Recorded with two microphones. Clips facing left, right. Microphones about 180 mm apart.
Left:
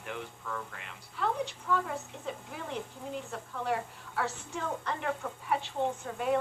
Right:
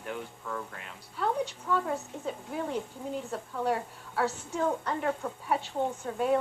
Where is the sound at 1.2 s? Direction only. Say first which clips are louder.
Right 2 dB; 40° right (ahead or behind).